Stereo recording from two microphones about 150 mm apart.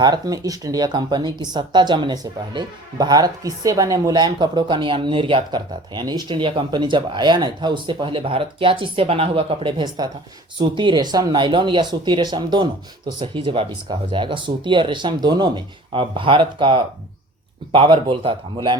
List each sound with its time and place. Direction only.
0.0 s speech: 25° right (ahead or behind)